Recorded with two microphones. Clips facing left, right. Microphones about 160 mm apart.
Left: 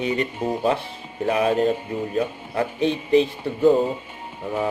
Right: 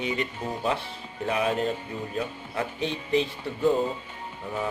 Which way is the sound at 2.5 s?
55° left (ahead or behind).